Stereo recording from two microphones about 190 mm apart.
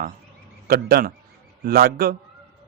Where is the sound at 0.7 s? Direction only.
50° right (ahead or behind).